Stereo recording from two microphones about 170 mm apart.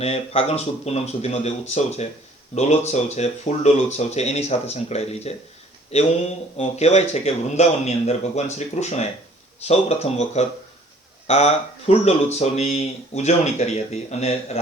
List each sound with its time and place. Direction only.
0.0 s speech: 35° left (ahead or behind)